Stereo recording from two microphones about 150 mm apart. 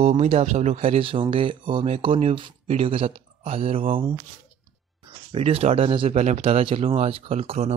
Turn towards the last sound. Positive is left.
turn(degrees=-45)  # may be behind; listen again after turning